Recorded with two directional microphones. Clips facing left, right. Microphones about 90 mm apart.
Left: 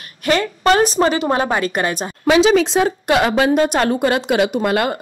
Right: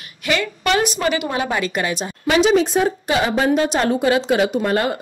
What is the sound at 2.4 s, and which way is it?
A woman's voice, 90° left.